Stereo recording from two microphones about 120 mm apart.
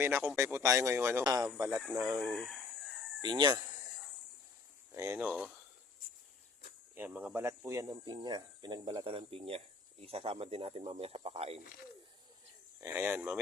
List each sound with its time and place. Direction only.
0.0 s a man's voice: 20° right (ahead or behind)
1.2 s a man's voice: 30° right (ahead or behind)
2.2 s chicken: centre (ahead or behind)
3.2 s speech: 40° right (ahead or behind)
4.9 s speech: 20° right (ahead or behind)
6.9 s speech: 15° right (ahead or behind); by 9.0 s 35° right (ahead or behind)
9.0 s speech: 50° right (ahead or behind)
12.8 s speech: 20° right (ahead or behind)